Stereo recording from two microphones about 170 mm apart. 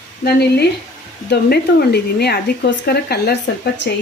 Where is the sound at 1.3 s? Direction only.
70° left (ahead or behind).